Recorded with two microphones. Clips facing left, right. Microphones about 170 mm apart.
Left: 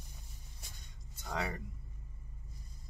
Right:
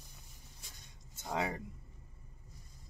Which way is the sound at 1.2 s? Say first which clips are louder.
Right 2 dB; 20° right (ahead or behind).